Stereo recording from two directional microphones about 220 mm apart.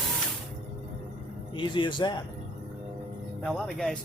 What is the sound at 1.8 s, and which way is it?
Speech, 20° left (ahead or behind).